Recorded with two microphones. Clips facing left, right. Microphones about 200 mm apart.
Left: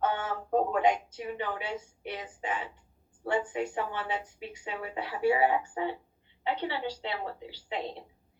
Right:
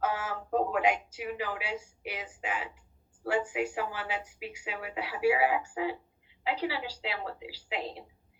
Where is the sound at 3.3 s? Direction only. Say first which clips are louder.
Even; 5° right (ahead or behind).